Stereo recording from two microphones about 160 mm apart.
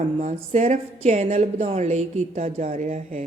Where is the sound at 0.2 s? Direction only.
45° right (ahead or behind).